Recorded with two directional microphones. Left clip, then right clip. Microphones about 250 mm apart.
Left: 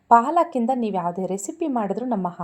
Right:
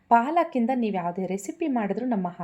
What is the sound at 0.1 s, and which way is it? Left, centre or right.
A woman's voice, left.